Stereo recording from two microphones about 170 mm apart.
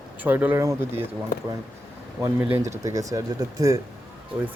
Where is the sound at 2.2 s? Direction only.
10° right (ahead or behind).